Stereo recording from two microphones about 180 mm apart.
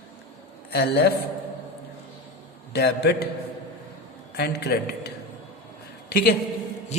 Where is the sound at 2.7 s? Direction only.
65° left (ahead or behind).